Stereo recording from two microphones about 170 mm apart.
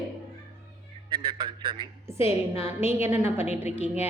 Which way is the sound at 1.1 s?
30° right (ahead or behind).